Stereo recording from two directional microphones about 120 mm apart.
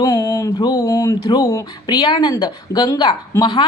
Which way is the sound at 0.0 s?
30° left (ahead or behind).